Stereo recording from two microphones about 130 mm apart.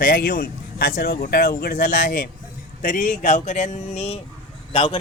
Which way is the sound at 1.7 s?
90° left.